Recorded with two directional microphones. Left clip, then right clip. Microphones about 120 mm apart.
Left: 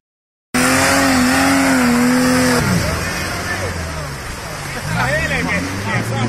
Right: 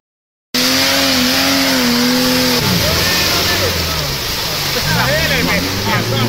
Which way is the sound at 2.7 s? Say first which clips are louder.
Right 5 dB; 15° right (ahead or behind).